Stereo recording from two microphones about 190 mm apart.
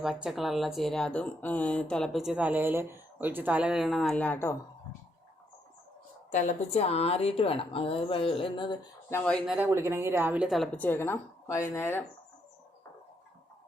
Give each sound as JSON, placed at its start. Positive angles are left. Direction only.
{"t": 0.0, "sound": "speech", "side_deg": 0}
{"t": 6.3, "sound": "a woman's voice", "side_deg": 40}
{"t": 9.0, "sound": "speech", "side_deg": 10}
{"t": 9.6, "sound": "speech", "side_deg": -15}